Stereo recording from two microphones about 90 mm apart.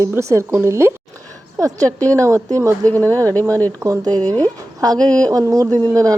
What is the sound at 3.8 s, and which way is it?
Speech, 40° right (ahead or behind).